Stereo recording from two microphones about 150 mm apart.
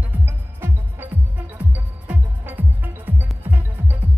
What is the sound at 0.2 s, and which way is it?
Music, 15° right (ahead or behind).